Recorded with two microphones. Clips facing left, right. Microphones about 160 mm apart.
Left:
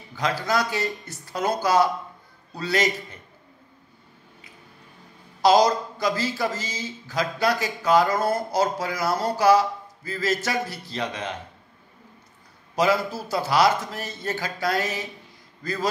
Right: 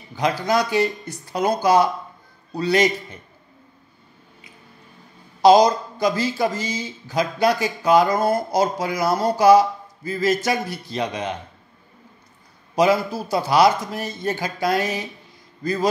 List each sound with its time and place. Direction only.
0.1 s speech: 20° right (ahead or behind)
5.4 s speech: 20° right (ahead or behind)
12.7 s a man's voice: 15° right (ahead or behind)